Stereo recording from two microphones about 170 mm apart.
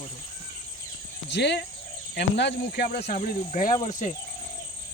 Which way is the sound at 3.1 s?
50° left (ahead or behind).